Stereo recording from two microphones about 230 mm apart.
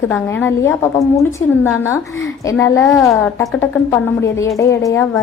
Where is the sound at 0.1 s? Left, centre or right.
Centre.